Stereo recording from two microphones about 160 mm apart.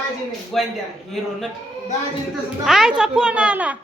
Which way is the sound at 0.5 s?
Centre (ahead or behind).